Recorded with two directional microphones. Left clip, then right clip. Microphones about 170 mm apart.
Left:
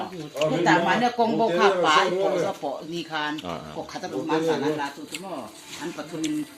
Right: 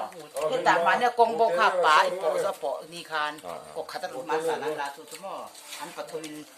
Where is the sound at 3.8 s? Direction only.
35° right (ahead or behind).